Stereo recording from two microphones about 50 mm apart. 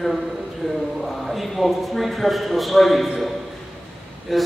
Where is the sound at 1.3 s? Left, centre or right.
Centre.